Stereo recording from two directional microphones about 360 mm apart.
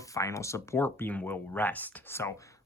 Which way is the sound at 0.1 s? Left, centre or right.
Centre.